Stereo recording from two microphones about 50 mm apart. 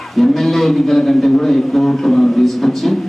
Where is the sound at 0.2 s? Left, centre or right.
Centre.